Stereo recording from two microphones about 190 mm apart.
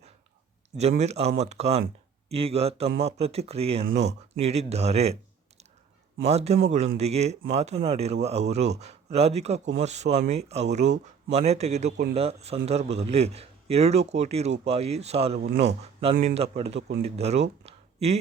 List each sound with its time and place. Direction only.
0.8 s a man's voice: 35° right (ahead or behind)
6.2 s a man's voice: 35° right (ahead or behind)